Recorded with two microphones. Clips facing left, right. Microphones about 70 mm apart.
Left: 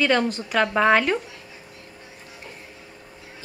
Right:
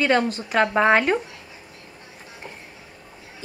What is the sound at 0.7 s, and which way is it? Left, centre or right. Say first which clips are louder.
Speech: even; centre.